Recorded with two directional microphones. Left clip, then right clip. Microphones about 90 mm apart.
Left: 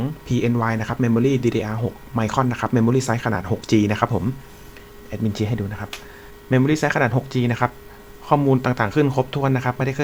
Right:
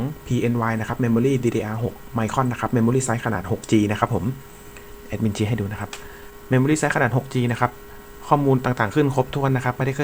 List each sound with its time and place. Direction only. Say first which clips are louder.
0.0 s speech: left 1 dB; 5° left (ahead or behind)
5.1 s speech: right 1 dB; 20° right (ahead or behind)
5.4 s speech: even; 5° right (ahead or behind)